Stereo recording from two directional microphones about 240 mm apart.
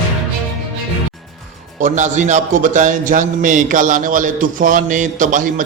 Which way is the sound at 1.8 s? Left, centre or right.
Right.